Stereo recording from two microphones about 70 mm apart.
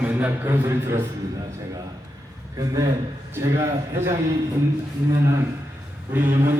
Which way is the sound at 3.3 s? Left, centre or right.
Right.